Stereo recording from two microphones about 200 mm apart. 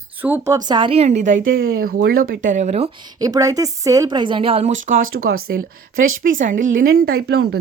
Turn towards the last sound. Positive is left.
turn(degrees=-55)  # may be behind; listen again after turning